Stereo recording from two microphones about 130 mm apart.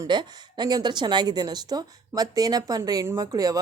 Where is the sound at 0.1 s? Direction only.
35° right (ahead or behind).